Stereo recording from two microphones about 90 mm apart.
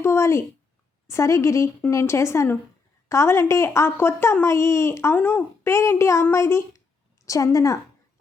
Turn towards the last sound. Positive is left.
turn(degrees=40)  # may be behind; listen again after turning